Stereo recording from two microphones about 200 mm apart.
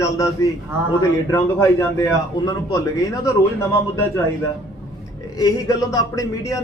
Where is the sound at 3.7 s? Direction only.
15° left (ahead or behind).